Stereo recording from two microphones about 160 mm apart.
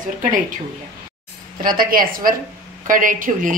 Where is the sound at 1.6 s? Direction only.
65° right (ahead or behind).